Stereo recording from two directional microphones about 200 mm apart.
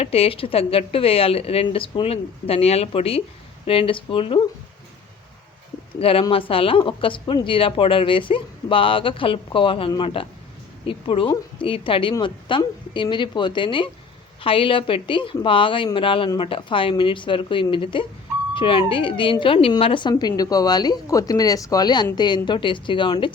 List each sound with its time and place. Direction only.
0.0 s a woman's voice: 30° left (ahead or behind)
6.0 s a woman's voice: 25° left (ahead or behind)